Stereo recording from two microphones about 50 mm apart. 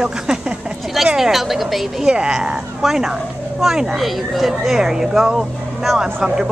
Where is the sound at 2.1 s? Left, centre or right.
Centre.